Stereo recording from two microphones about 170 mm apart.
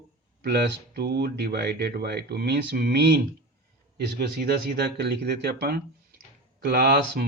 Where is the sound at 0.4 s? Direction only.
70° right (ahead or behind).